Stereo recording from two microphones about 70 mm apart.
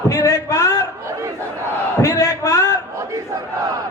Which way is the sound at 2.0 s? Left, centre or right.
Left.